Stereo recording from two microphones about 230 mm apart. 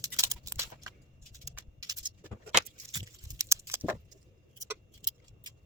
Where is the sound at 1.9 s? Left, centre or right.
Centre.